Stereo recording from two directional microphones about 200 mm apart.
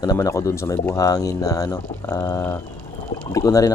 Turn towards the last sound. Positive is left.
turn(degrees=15)  # may be behind; listen again after turning